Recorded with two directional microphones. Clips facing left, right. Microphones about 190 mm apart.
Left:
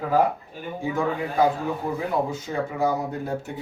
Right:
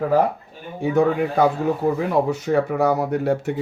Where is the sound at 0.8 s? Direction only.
70° right (ahead or behind).